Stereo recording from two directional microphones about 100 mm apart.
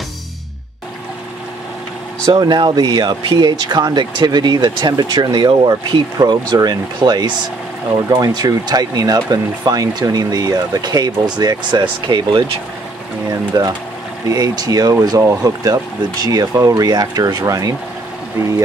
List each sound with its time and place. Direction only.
2.4 s speech: 45° right (ahead or behind)
13.3 s speech: 35° right (ahead or behind)